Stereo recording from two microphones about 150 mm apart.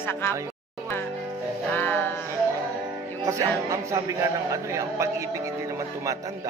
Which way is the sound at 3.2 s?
20° right (ahead or behind).